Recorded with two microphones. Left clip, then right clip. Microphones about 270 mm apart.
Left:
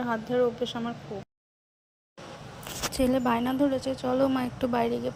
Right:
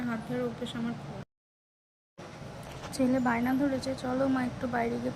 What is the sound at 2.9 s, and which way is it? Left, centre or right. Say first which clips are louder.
A woman's voice: left 3 dB; left.